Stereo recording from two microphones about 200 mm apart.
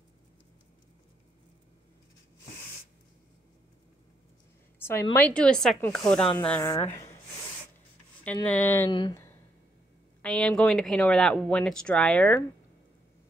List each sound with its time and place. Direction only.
4.7 s a sound: 10° left (ahead or behind)
5.1 s speech: 5° left (ahead or behind)
8.5 s speech: 10° left (ahead or behind)
10.2 s speech: 5° left (ahead or behind)